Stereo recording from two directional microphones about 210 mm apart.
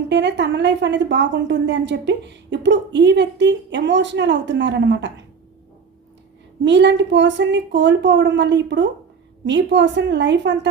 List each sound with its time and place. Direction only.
0.1 s a woman's voice: 55° right (ahead or behind)
6.7 s a woman's voice: 55° right (ahead or behind)